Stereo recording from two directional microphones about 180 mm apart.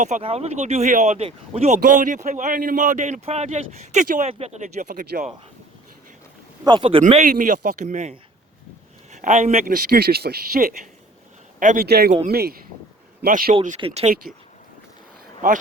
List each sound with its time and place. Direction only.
0.0 s speech: 35° right (ahead or behind)
6.7 s speech: 25° right (ahead or behind)
7.1 s speech: 45° right (ahead or behind)
9.1 s speech: 40° right (ahead or behind); by 10.8 s 60° right (ahead or behind)
11.6 s speech: 45° right (ahead or behind)
11.9 s speech: 60° right (ahead or behind)
13.7 s speech: 35° right (ahead or behind)